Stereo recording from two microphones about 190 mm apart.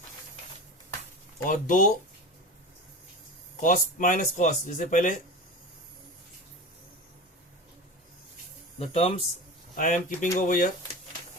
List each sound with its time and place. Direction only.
1.5 s speech: 45° left (ahead or behind)
3.6 s speech: 45° left (ahead or behind)
8.8 s speech: 30° left (ahead or behind)
9.7 s speech: 40° left (ahead or behind)